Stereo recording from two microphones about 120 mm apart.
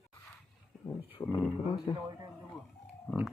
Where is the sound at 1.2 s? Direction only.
30° left (ahead or behind).